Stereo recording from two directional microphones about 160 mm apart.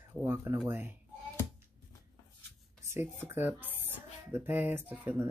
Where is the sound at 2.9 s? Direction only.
15° right (ahead or behind).